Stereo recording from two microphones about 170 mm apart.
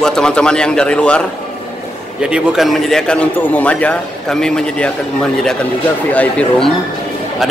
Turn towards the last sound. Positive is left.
turn(degrees=5)  # may be behind; listen again after turning